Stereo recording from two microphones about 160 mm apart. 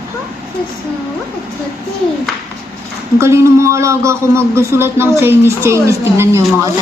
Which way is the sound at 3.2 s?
15° right (ahead or behind).